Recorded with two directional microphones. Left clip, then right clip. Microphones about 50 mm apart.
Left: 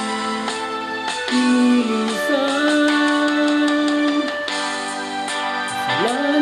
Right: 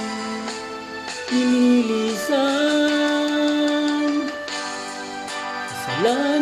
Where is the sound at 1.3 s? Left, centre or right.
Left.